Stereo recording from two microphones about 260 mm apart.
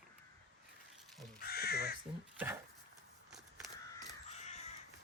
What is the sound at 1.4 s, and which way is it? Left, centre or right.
Speech, left.